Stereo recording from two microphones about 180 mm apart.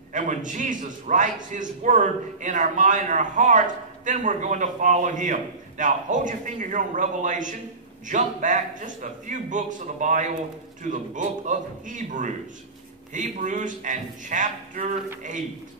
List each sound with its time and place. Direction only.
0.1 s a man's voice: 45° right (ahead or behind)